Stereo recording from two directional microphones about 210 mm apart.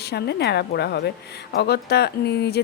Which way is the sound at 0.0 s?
50° left (ahead or behind).